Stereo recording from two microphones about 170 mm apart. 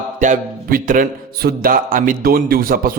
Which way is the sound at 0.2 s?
50° right (ahead or behind).